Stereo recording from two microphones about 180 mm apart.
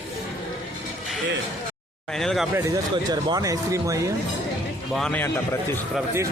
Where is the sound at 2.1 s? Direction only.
Centre (ahead or behind).